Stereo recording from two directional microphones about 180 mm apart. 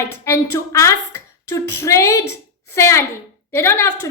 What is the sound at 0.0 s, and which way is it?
A woman's voice, 15° left (ahead or behind).